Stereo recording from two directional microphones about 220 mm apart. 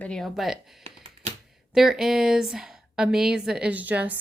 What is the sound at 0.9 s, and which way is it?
Computer keyboard, 25° right (ahead or behind).